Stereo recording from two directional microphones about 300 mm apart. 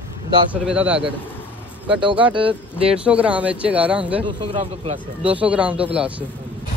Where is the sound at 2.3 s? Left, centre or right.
Centre.